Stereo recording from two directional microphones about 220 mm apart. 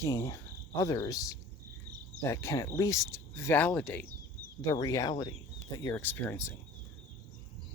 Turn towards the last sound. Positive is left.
turn(degrees=10)  # may be behind; listen again after turning